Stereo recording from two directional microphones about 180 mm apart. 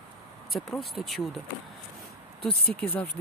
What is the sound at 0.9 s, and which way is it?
Speech, centre (ahead or behind).